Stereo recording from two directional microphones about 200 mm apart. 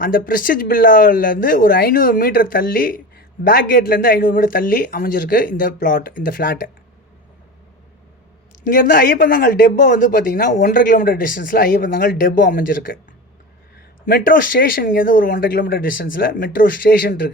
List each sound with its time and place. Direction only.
0.0 s speech: 45° left (ahead or behind)
8.6 s speech: 45° left (ahead or behind)